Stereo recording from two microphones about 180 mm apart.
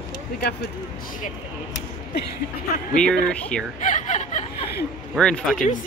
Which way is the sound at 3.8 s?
45° left (ahead or behind).